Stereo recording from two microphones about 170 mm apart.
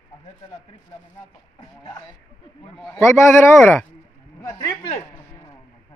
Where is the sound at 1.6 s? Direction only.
25° left (ahead or behind).